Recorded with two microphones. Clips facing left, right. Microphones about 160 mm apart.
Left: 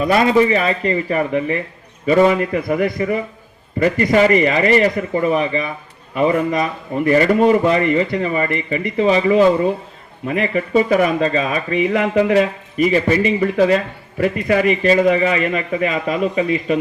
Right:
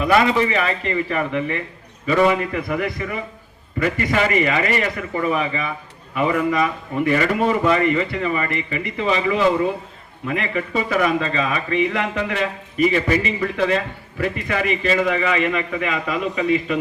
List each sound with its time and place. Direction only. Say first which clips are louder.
0.0 s a man's voice: left 3 dB; 35° left (ahead or behind)